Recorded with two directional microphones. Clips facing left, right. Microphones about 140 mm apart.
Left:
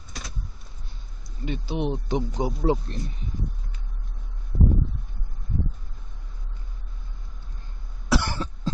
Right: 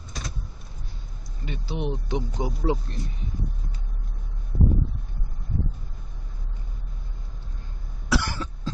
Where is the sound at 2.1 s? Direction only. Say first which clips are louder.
Left 3 dB; 35° left (ahead or behind).